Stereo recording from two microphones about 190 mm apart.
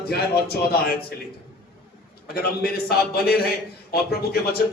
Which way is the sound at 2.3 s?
55° left (ahead or behind).